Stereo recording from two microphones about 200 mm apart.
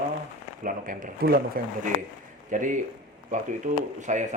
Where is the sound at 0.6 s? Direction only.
40° right (ahead or behind).